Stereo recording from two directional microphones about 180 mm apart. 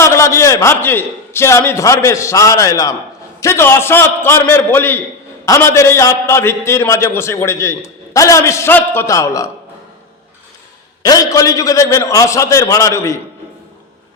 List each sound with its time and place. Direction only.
0.0 s a man's voice: 15° left (ahead or behind)
11.0 s a man's voice: 20° left (ahead or behind)